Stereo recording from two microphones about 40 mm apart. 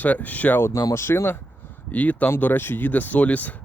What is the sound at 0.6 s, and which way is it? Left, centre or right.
Speech, left.